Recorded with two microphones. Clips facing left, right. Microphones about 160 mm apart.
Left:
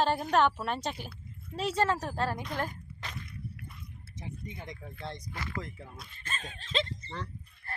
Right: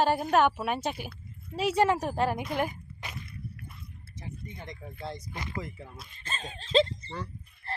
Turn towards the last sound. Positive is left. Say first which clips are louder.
# right 5 dB
turn(degrees=-30)  # may be behind; listen again after turning